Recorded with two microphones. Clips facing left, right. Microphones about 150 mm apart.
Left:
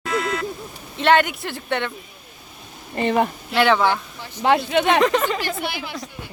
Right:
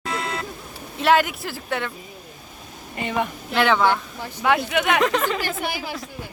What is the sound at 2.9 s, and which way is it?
Speech, 35° left (ahead or behind).